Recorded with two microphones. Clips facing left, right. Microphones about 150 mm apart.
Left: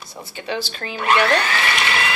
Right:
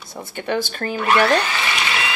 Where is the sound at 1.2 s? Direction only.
10° right (ahead or behind).